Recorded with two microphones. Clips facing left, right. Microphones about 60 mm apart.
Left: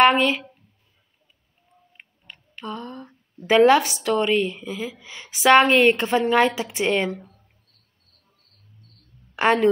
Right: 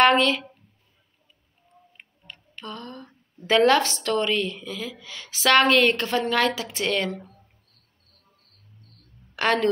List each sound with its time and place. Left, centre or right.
0.0 s speech: centre
2.0 s tick: centre
3.4 s a woman's voice: centre
9.3 s a woman's voice: centre